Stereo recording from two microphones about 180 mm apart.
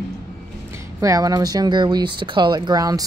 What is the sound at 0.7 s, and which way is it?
Speech, 20° right (ahead or behind).